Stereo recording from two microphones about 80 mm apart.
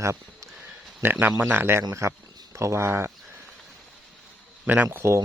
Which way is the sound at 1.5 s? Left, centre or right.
Right.